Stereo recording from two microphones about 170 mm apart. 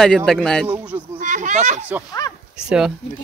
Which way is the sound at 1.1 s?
45° right (ahead or behind).